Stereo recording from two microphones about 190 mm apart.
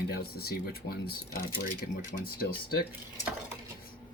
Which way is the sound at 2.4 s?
55° left (ahead or behind).